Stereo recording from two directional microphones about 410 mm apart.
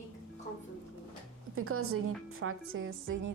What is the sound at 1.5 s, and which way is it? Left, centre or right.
A woman's voice, right.